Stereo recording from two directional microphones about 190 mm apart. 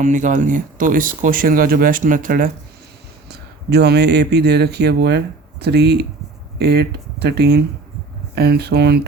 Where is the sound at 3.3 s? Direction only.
60° right (ahead or behind).